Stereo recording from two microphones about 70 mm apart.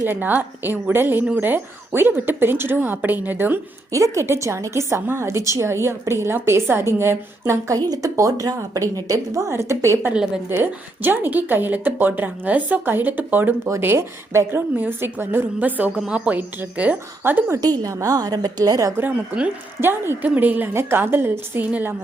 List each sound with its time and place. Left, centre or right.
0.0 s speech: right
3.9 s a woman's voice: right
7.8 s a woman's voice: right
10.5 s a woman's voice: right
16.0 s a woman's voice: centre
17.6 s a woman's voice: right
18.9 s a woman's voice: right
20.2 s a woman's voice: right